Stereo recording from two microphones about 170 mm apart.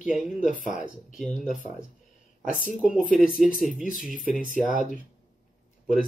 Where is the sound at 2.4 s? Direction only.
50° left (ahead or behind).